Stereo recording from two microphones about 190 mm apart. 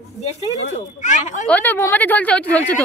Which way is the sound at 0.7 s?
40° left (ahead or behind).